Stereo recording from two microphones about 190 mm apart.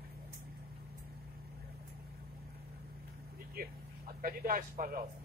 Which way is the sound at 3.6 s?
50° right (ahead or behind).